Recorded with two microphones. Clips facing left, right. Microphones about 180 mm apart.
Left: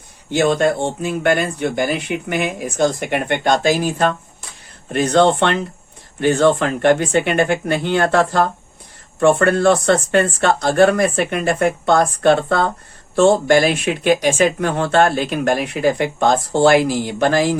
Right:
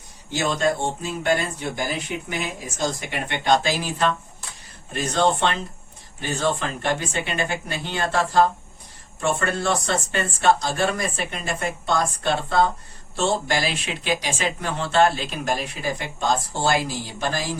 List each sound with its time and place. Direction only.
0.3 s speech: 60° left (ahead or behind)
4.9 s speech: 65° left (ahead or behind)